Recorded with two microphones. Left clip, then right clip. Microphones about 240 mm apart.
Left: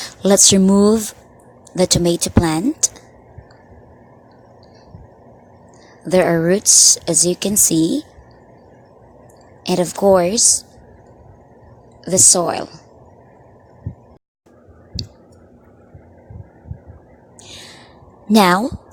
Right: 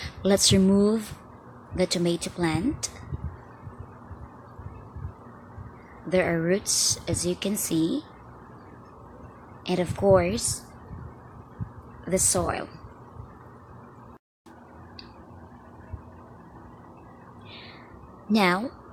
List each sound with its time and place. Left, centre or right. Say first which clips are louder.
0.0 s speech: left 9 dB; left
6.1 s speech: left 9 dB; left
9.6 s speech: left 8 dB; left
12.0 s speech: left 11 dB; left
18.3 s speech: left 10 dB; left